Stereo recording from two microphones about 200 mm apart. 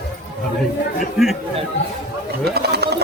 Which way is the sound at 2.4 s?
55° right (ahead or behind).